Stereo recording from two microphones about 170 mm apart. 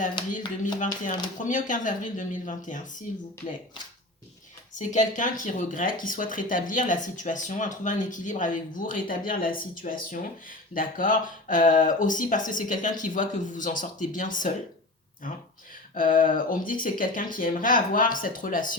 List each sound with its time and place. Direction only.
0.8 s speech: 50° left (ahead or behind)
4.7 s speech: 45° left (ahead or behind)
16.0 s speech: 55° left (ahead or behind)